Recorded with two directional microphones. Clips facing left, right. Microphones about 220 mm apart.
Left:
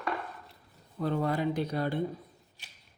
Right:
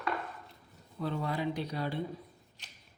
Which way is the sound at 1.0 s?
50° left (ahead or behind).